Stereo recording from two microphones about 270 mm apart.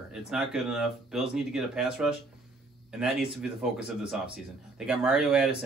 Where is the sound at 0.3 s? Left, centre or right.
Centre.